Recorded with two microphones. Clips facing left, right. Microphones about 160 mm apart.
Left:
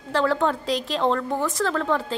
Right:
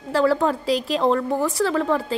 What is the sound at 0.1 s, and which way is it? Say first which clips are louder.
A woman's voice: right 3 dB; 5° right (ahead or behind).